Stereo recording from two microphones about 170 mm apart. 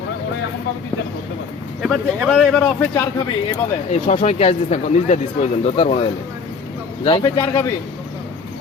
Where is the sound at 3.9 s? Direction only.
35° left (ahead or behind).